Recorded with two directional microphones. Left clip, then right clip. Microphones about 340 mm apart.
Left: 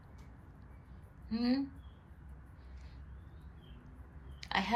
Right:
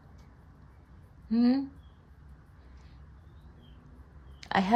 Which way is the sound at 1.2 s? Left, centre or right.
Right.